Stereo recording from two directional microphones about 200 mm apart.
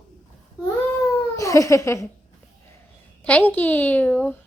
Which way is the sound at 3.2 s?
10° left (ahead or behind).